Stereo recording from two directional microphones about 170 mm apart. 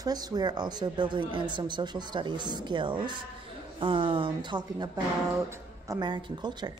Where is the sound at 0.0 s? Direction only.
20° right (ahead or behind).